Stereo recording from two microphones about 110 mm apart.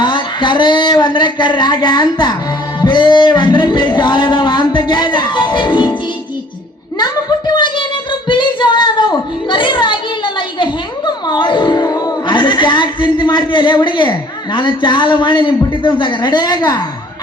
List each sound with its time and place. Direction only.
0.0 s speech: 45° left (ahead or behind)
7.0 s a sound: 40° left (ahead or behind)
10.6 s speech: 45° left (ahead or behind)